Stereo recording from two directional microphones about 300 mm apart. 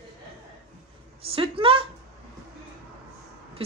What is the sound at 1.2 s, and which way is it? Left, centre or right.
Speech, centre.